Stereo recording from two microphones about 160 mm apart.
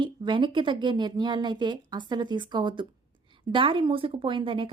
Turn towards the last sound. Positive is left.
turn(degrees=-35)  # may be behind; listen again after turning